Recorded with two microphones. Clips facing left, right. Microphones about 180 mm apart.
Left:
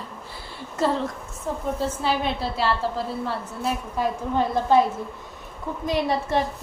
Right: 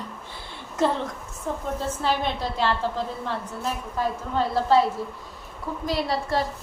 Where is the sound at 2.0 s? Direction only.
10° left (ahead or behind).